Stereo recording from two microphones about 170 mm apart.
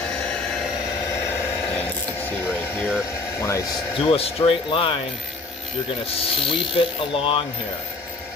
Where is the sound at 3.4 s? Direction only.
20° left (ahead or behind).